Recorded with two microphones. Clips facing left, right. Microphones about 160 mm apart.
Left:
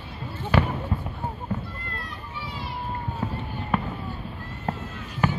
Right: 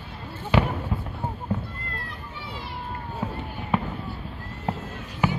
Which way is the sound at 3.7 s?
20° right (ahead or behind).